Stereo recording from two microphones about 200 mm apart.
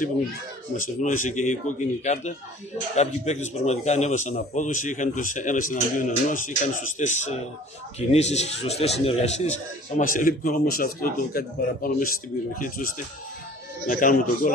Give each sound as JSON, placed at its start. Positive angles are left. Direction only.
{"t": 0.7, "sound": "a man's voice", "side_deg": 40}